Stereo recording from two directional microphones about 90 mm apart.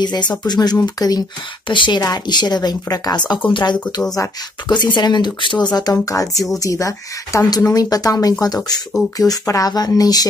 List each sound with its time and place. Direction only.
0.0 s speech: 55° left (ahead or behind)
1.7 s speech: 65° left (ahead or behind)
2.0 s speech: 50° left (ahead or behind)
4.1 s speech: 50° left (ahead or behind)
5.7 s speech: 50° left (ahead or behind)